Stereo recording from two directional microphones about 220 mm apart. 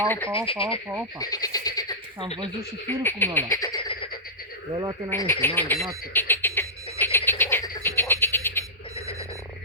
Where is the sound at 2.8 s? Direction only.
10° left (ahead or behind).